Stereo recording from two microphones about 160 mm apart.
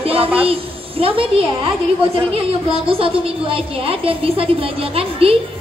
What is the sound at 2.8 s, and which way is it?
A woman's voice, 35° right (ahead or behind).